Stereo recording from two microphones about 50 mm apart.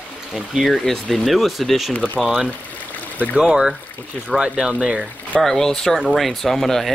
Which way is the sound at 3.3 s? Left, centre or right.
Centre.